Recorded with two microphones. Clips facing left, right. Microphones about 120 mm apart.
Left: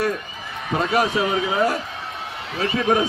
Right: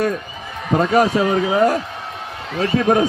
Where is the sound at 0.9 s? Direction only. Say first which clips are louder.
Right 4 dB; 40° right (ahead or behind).